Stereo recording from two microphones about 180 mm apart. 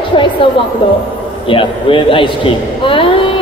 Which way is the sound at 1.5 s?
30° left (ahead or behind).